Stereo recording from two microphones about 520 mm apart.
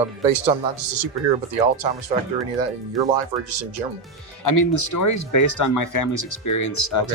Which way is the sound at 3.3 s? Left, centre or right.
Centre.